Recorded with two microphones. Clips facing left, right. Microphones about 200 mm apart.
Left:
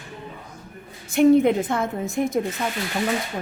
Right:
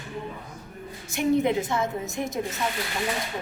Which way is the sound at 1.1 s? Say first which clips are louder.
Left 7 dB; 55° left (ahead or behind).